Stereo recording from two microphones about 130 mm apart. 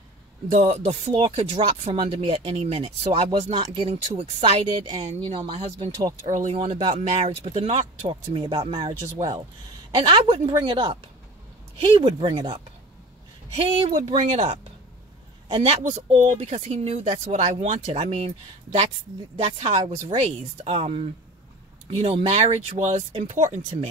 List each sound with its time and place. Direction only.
0.5 s speech: 55° right (ahead or behind); by 5.4 s 40° right (ahead or behind)
6.2 s speech: 60° right (ahead or behind); by 7.0 s 40° right (ahead or behind)
7.0 s speech: 55° right (ahead or behind)
14.0 s a man's voice: 50° right (ahead or behind)
16.3 s speech: 60° right (ahead or behind)